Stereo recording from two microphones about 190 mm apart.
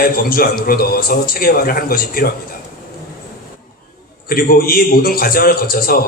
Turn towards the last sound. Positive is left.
turn(degrees=50)  # may be behind; listen again after turning